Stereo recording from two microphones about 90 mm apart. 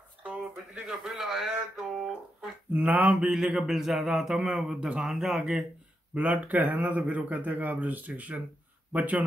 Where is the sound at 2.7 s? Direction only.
20° right (ahead or behind).